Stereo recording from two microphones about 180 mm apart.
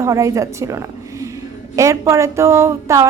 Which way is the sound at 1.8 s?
15° right (ahead or behind).